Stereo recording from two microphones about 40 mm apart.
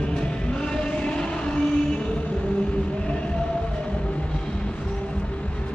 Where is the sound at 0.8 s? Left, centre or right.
Left.